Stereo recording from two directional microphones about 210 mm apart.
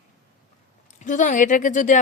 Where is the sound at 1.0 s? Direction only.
35° left (ahead or behind).